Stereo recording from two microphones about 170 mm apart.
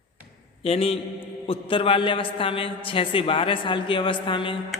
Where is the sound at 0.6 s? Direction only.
35° left (ahead or behind).